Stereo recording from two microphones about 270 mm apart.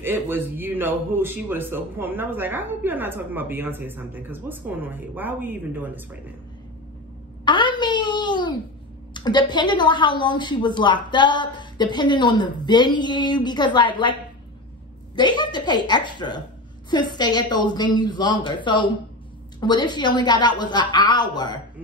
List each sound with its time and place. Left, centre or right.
0.0 s speech: centre
7.4 s wail: centre
9.1 s a woman's voice: centre
15.1 s a woman's voice: centre